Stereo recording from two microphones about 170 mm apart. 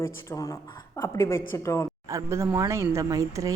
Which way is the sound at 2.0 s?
15° right (ahead or behind).